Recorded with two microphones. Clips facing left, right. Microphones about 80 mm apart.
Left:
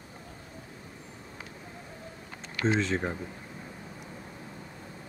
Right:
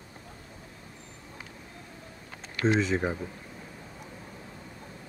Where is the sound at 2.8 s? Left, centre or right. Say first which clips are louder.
Right 2 dB; centre.